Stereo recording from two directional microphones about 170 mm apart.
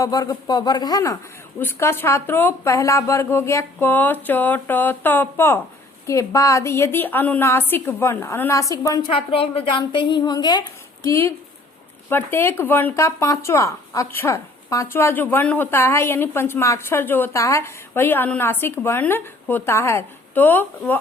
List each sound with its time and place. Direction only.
0.0 s a woman's voice: 20° left (ahead or behind)
9.1 s a woman's voice: 35° left (ahead or behind); by 21.0 s 10° left (ahead or behind)